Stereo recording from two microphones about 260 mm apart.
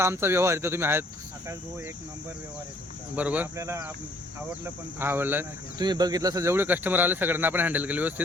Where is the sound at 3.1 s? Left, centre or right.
Centre.